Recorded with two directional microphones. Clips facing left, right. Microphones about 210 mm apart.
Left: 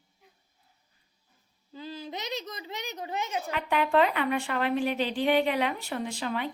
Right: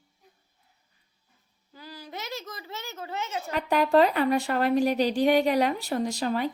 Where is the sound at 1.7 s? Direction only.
20° left (ahead or behind).